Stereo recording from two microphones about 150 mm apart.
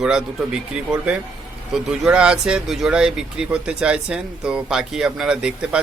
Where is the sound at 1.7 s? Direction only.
5° right (ahead or behind).